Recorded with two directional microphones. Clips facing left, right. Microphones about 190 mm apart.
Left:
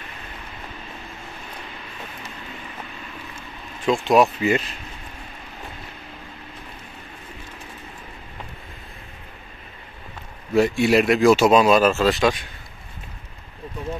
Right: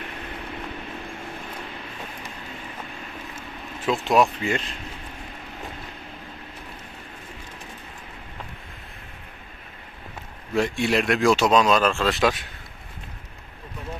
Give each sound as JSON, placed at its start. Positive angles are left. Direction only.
{"t": 3.3, "sound": "speech", "side_deg": -5}
{"t": 10.5, "sound": "speech", "side_deg": 5}